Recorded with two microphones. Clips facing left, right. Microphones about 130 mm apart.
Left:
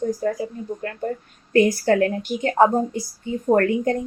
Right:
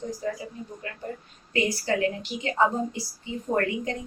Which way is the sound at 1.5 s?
50° left (ahead or behind).